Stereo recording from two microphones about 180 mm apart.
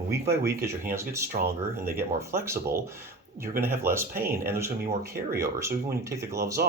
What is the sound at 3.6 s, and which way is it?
Speech, 10° right (ahead or behind).